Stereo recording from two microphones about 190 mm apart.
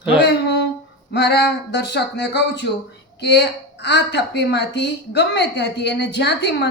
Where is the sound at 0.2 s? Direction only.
65° left (ahead or behind).